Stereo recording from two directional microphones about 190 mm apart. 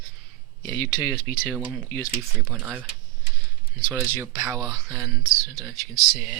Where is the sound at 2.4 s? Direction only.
5° right (ahead or behind).